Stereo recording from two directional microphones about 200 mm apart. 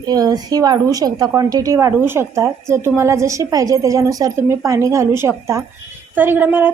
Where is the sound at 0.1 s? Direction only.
20° right (ahead or behind).